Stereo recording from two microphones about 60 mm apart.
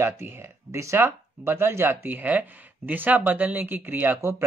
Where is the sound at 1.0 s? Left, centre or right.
Right.